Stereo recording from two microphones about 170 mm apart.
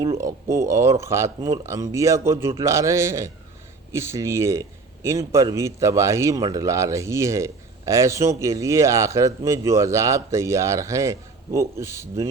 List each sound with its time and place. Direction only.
0.2 s a man's voice: 15° right (ahead or behind)